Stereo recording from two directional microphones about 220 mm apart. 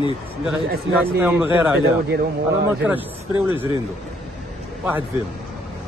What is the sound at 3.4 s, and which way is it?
Speech, 10° right (ahead or behind).